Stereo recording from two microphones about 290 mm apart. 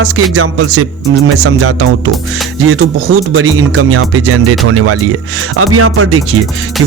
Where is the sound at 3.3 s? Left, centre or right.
Right.